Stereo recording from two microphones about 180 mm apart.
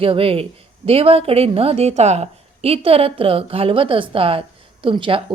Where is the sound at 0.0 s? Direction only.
30° right (ahead or behind).